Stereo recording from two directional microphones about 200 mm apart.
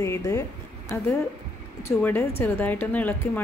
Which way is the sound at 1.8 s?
10° left (ahead or behind).